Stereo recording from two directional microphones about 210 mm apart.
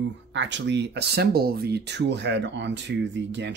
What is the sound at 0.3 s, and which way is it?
Speech, 60° right (ahead or behind).